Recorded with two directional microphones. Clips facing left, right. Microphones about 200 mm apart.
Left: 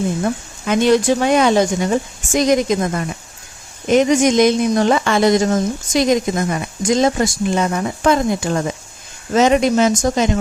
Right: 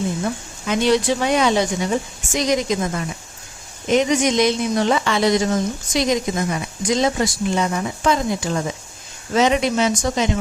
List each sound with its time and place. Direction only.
0.7 s speech: 50° left (ahead or behind)